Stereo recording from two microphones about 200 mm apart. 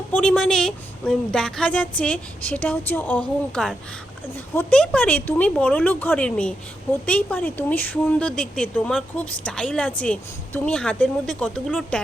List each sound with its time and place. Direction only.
0.1 s a woman's voice: 5° left (ahead or behind)